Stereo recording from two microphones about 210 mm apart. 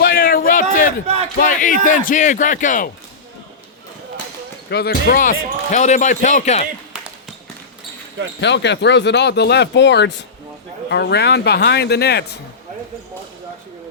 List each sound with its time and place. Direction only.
0.0 s a sound: 45° left (ahead or behind)
1.0 s speech: 30° right (ahead or behind)
1.4 s speech: 40° left (ahead or behind)
4.7 s speech: 50° left (ahead or behind); by 6.7 s 30° left (ahead or behind)
8.4 s speech: 55° left (ahead or behind)